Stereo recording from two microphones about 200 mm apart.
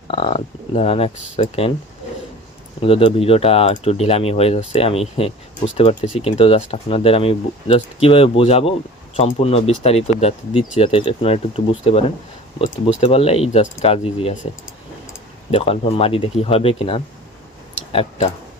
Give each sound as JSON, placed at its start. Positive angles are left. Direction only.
{"t": 0.1, "sound": "speech", "side_deg": 30}
{"t": 2.8, "sound": "speech", "side_deg": 30}
{"t": 15.5, "sound": "speech", "side_deg": 30}